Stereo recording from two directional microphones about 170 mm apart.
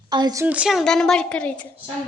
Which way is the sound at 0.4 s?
5° right (ahead or behind).